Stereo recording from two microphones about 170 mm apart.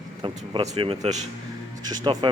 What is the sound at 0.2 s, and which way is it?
Speech, 35° right (ahead or behind).